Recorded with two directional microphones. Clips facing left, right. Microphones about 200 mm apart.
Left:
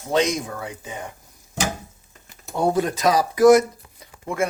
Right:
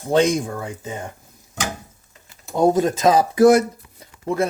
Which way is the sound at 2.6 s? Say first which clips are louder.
Right 4 dB; 20° right (ahead or behind).